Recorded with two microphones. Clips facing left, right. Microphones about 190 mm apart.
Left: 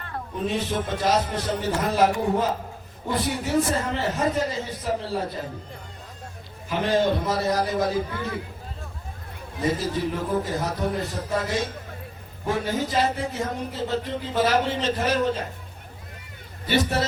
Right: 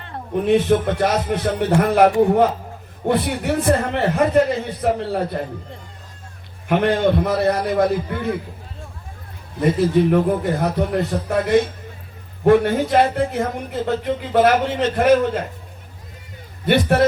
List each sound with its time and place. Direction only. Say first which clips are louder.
0.3 s speech: right 10 dB; 65° right (ahead or behind)
6.7 s speech: right 5 dB; 60° right (ahead or behind)
9.6 s speech: right 9 dB; 60° right (ahead or behind)
16.6 s speech: right 8 dB; 55° right (ahead or behind)